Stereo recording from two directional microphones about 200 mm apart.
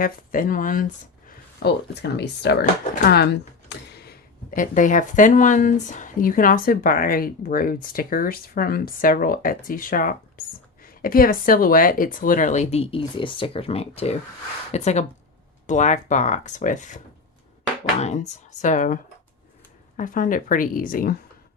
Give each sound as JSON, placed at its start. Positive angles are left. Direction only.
{"t": 0.0, "sound": "speech", "side_deg": 45}
{"t": 18.0, "sound": "speech", "side_deg": 35}
{"t": 20.0, "sound": "speech", "side_deg": 40}